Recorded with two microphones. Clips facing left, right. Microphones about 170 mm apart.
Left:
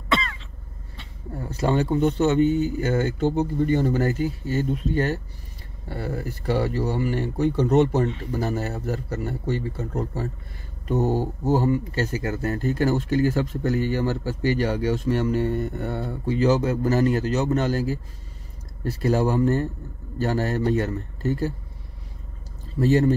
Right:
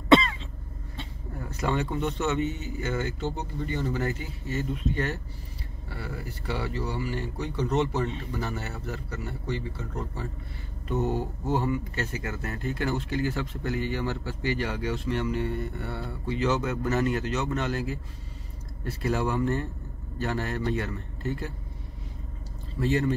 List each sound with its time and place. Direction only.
0.1 s cough: 30° right (ahead or behind)
1.3 s speech: 30° left (ahead or behind)
3.2 s speech: 50° left (ahead or behind)
22.8 s speech: 40° left (ahead or behind)